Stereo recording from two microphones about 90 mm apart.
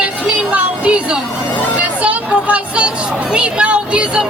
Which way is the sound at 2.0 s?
15° right (ahead or behind).